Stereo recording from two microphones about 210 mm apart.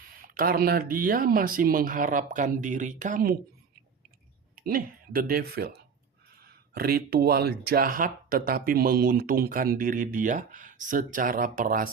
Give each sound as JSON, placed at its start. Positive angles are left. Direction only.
{"t": 0.0, "sound": "speech", "side_deg": -40}
{"t": 4.5, "sound": "speech", "side_deg": -40}
{"t": 6.7, "sound": "speech", "side_deg": -45}